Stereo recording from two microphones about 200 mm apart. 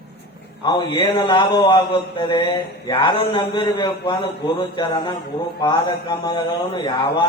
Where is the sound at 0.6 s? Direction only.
20° left (ahead or behind).